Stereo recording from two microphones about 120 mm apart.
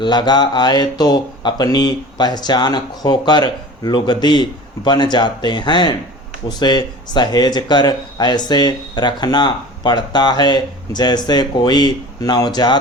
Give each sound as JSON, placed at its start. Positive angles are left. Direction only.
{"t": 0.0, "sound": "speech", "side_deg": 40}